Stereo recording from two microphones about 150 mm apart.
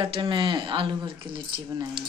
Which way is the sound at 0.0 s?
30° right (ahead or behind).